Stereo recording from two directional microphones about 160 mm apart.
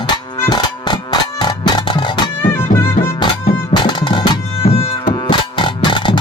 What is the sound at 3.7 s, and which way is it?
Bagpipes, 30° left (ahead or behind).